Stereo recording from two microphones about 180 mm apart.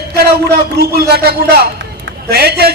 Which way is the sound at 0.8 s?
60° right (ahead or behind).